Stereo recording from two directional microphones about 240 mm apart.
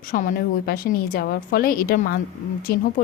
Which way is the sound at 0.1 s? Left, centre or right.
Left.